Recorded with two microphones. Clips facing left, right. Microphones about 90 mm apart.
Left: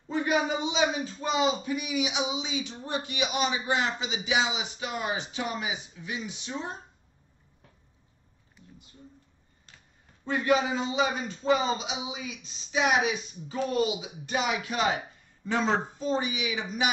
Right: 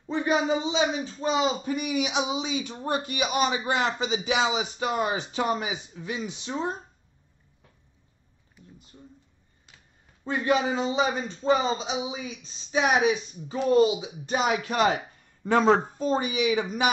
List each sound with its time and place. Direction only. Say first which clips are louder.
0.1 s speech: right 2 dB; 25° right (ahead or behind)
10.2 s a man's voice: right 1 dB; 25° right (ahead or behind); by 16.6 s 45° right (ahead or behind)